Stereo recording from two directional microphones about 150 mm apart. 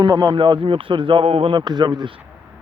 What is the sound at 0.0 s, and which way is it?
A man's voice, 25° right (ahead or behind).